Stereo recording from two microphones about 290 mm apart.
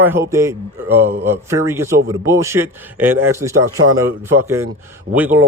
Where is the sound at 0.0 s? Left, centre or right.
Centre.